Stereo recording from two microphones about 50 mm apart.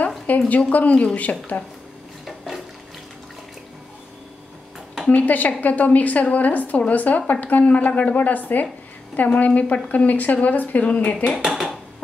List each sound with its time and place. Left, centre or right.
0.5 s a woman's voice: left
2.2 s a sound: centre
5.1 s a woman's voice: left
11.3 s speech: centre